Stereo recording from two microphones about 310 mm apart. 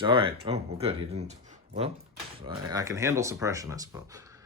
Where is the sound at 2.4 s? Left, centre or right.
Centre.